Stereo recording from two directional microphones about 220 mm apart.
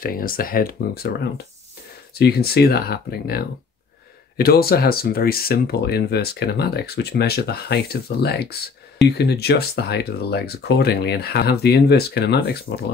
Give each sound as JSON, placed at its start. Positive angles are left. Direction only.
{"t": 0.0, "sound": "speech", "side_deg": 40}
{"t": 2.1, "sound": "speech", "side_deg": 45}